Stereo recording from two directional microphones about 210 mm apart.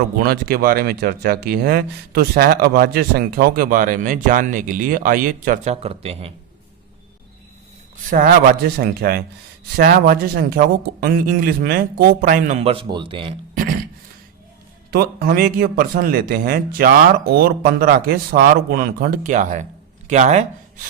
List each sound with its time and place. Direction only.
0.2 s speech: 45° right (ahead or behind); by 6.3 s 30° right (ahead or behind)
8.1 s speech: 45° right (ahead or behind); by 13.3 s 25° right (ahead or behind)
13.5 s a sound: 40° right (ahead or behind)
14.8 s speech: 45° right (ahead or behind)